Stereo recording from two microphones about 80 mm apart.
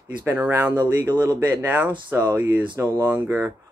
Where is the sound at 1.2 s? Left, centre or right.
Right.